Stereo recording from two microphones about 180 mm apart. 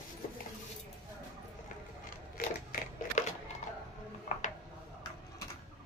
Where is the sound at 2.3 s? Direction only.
55° left (ahead or behind).